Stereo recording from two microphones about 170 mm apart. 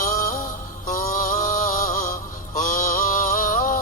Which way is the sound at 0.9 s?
50° left (ahead or behind).